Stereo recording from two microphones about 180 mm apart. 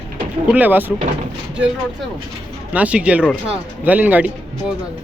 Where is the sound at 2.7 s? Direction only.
5° right (ahead or behind).